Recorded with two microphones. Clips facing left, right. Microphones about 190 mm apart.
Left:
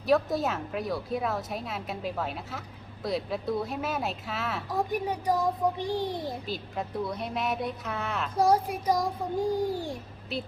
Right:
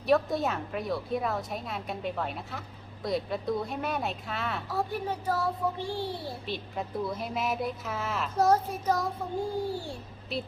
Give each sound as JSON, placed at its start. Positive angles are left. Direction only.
{"t": 0.0, "sound": "a woman's voice", "side_deg": 0}
{"t": 4.7, "sound": "a child's voice", "side_deg": 15}
{"t": 6.5, "sound": "a woman's voice", "side_deg": 0}
{"t": 8.4, "sound": "a child's voice", "side_deg": 10}
{"t": 10.3, "sound": "a woman's voice", "side_deg": 0}